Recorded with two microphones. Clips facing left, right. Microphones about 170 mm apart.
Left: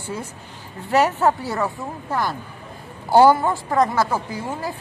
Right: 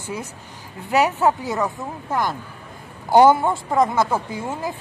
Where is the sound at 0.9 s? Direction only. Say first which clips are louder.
Even; 10° right (ahead or behind).